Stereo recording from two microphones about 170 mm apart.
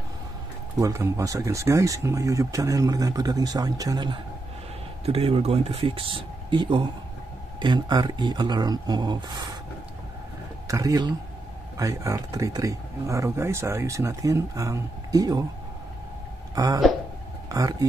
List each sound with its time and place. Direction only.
0.7 s speech: 20° right (ahead or behind)
5.0 s speech: 35° right (ahead or behind)
10.7 s speech: 20° right (ahead or behind)
16.5 s speech: 20° right (ahead or behind)